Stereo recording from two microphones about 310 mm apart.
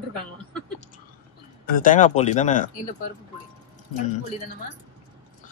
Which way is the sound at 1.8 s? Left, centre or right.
Left.